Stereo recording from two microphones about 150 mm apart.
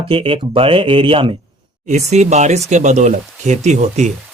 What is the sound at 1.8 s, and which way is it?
Speech, 50° right (ahead or behind).